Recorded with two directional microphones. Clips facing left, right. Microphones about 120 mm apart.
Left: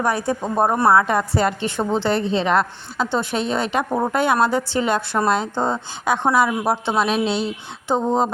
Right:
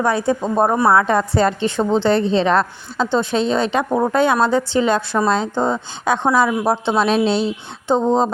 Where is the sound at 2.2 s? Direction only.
30° right (ahead or behind).